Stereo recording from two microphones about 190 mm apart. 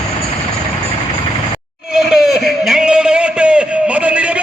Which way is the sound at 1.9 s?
5° right (ahead or behind).